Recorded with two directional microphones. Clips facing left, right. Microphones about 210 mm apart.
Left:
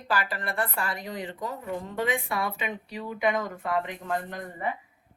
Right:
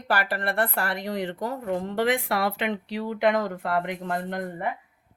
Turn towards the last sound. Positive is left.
turn(degrees=-70)  # may be behind; listen again after turning